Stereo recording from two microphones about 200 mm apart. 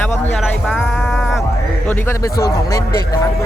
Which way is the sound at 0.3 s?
Centre (ahead or behind).